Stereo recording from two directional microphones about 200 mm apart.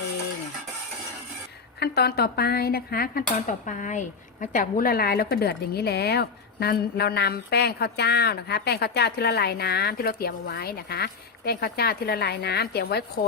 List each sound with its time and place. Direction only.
1.8 s speech: 50° left (ahead or behind)